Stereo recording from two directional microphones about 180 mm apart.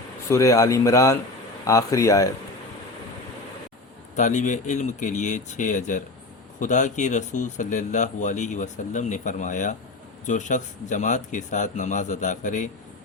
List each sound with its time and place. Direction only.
0.3 s speech: 15° left (ahead or behind)
4.1 s speech: 40° left (ahead or behind)